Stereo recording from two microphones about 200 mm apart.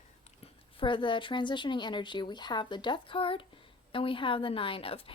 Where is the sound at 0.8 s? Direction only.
25° left (ahead or behind).